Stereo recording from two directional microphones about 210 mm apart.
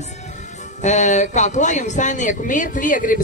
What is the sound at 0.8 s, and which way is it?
Speech, 35° left (ahead or behind).